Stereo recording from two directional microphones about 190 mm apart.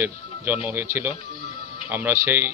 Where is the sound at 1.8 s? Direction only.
10° right (ahead or behind).